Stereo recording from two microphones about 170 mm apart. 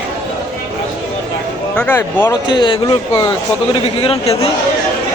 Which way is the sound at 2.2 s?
25° left (ahead or behind).